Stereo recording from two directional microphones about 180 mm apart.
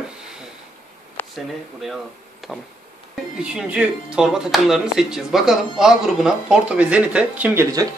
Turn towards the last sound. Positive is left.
turn(degrees=-5)  # may be behind; listen again after turning